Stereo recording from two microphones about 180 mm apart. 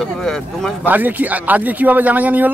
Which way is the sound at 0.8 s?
10° right (ahead or behind).